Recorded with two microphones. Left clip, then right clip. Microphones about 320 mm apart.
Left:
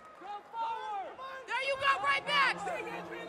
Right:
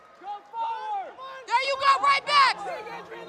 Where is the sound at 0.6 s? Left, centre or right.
Right.